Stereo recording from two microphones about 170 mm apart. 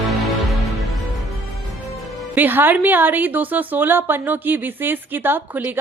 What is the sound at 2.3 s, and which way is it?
A woman's voice, 10° right (ahead or behind).